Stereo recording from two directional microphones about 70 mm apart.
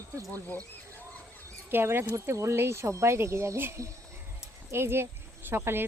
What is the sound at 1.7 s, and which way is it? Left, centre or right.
Speech, right.